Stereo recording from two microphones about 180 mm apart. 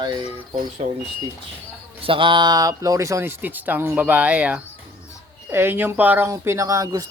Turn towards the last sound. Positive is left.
turn(degrees=-20)  # may be behind; listen again after turning